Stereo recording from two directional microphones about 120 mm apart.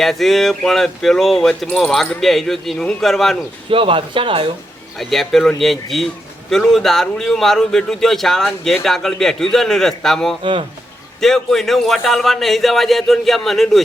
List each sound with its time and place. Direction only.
0.0 s speech: centre (ahead or behind)
3.7 s speech: 50° right (ahead or behind)
4.9 s speech: centre (ahead or behind)
10.4 s speech: 45° right (ahead or behind)
11.2 s speech: centre (ahead or behind)